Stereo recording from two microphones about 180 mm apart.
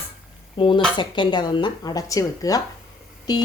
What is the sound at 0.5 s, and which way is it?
Speech, 30° left (ahead or behind).